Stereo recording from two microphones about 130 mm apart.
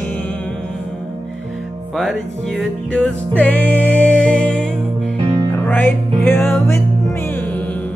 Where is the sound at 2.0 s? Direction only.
Centre (ahead or behind); by 6.8 s 20° left (ahead or behind).